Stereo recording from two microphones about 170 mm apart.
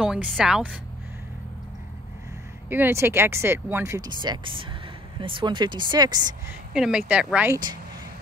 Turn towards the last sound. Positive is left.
turn(degrees=-5)  # may be behind; listen again after turning